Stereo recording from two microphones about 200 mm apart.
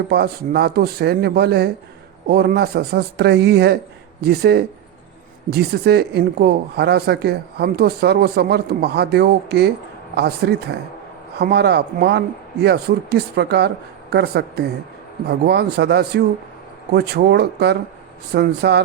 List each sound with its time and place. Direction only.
0.1 s a woman's voice: 55° right (ahead or behind)